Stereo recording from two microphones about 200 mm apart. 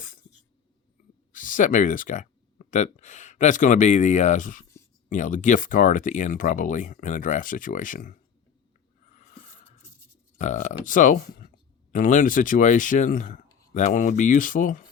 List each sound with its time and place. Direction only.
1.3 s speech: 40° left (ahead or behind)
10.3 s speech: 35° left (ahead or behind)